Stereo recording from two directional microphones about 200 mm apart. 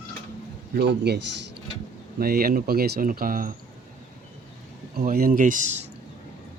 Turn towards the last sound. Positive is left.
turn(degrees=-35)  # may be behind; listen again after turning